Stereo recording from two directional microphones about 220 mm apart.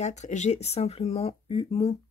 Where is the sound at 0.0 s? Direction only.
30° left (ahead or behind).